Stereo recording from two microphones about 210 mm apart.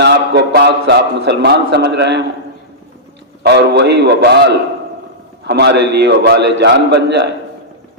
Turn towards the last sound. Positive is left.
turn(degrees=-55)  # may be behind; listen again after turning